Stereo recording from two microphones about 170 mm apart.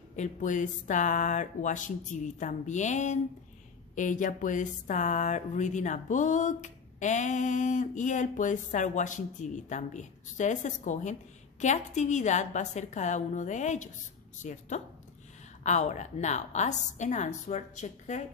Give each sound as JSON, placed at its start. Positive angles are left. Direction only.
{"t": 0.1, "sound": "speech", "side_deg": 45}